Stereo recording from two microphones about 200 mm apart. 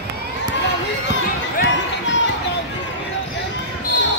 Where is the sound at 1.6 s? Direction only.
65° left (ahead or behind).